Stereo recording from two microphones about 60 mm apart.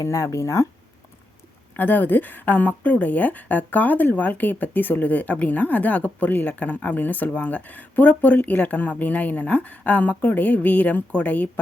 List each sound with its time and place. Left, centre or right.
0.0 s speech: left
1.7 s a woman's voice: left